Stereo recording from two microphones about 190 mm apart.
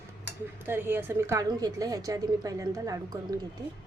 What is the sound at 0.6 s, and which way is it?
A woman's voice, 10° right (ahead or behind).